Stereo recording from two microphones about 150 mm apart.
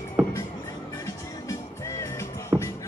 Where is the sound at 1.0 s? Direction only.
20° left (ahead or behind).